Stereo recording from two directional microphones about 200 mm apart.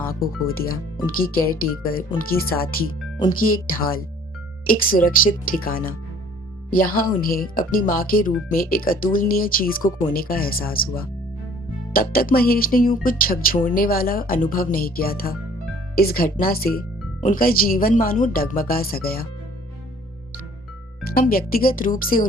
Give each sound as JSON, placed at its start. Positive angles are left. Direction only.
{"t": 1.2, "sound": "speech", "side_deg": 45}
{"t": 21.0, "sound": "speech", "side_deg": 50}